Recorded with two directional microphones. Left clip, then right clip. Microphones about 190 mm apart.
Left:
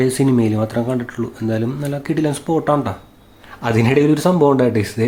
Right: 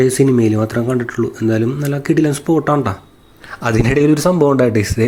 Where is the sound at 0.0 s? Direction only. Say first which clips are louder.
Right 4 dB; 15° right (ahead or behind).